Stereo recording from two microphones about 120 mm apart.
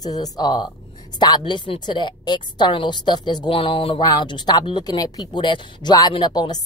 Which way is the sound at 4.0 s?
35° left (ahead or behind).